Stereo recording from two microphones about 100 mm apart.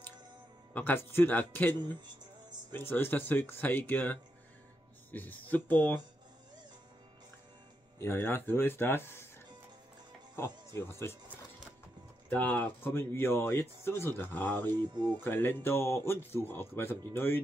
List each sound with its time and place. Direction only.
0.7 s speech: 20° left (ahead or behind)
8.0 s speech: 20° left (ahead or behind)
10.7 s speech: 25° left (ahead or behind)
12.3 s speech: 15° left (ahead or behind)